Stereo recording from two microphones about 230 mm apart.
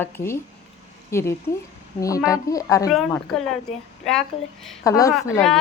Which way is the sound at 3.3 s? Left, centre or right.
Centre.